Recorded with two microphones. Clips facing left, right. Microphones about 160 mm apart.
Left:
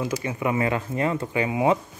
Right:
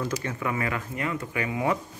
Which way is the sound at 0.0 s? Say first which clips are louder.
Left 3 dB; 15° left (ahead or behind).